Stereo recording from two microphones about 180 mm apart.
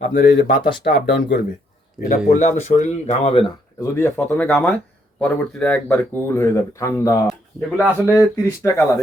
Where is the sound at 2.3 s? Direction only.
40° left (ahead or behind).